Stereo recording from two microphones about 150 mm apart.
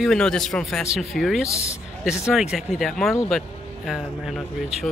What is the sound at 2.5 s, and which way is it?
Speech, centre (ahead or behind).